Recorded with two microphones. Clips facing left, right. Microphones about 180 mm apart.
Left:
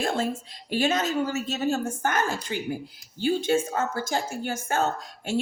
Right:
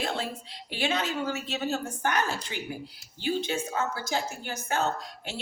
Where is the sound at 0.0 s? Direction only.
45° left (ahead or behind).